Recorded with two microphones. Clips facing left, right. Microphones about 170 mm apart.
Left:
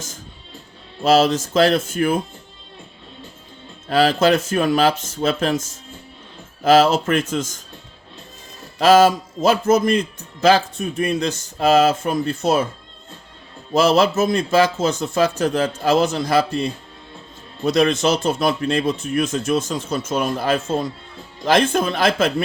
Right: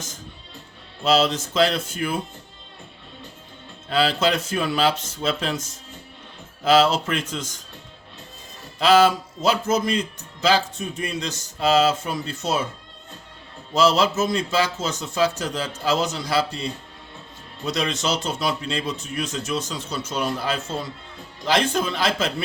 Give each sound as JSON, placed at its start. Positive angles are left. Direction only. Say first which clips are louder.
{"t": 1.0, "sound": "speech", "louder": "left 5 dB", "side_deg": 50}
{"t": 3.8, "sound": "speech", "louder": "left 5 dB", "side_deg": 50}
{"t": 6.7, "sound": "speech", "louder": "left 4 dB", "side_deg": 50}
{"t": 8.8, "sound": "speech", "louder": "left 4 dB", "side_deg": 45}
{"t": 13.7, "sound": "speech", "louder": "left 4 dB", "side_deg": 55}
{"t": 17.7, "sound": "speech", "louder": "left 8 dB", "side_deg": 55}